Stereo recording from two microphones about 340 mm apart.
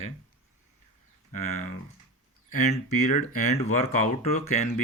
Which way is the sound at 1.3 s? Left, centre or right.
Left.